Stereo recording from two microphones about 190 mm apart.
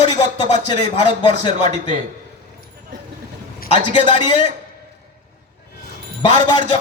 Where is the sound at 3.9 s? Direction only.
25° left (ahead or behind).